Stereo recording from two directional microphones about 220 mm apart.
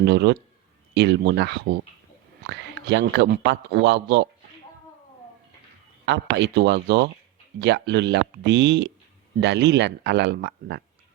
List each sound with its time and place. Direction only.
0.0 s a man's voice: 50° right (ahead or behind)
6.1 s a man's voice: 50° right (ahead or behind)